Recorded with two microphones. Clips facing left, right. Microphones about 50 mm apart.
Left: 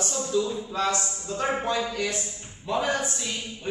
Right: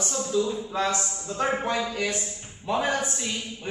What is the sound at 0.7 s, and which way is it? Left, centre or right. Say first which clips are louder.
Speech: even; right.